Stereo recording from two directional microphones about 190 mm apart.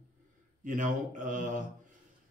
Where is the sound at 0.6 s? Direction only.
40° right (ahead or behind).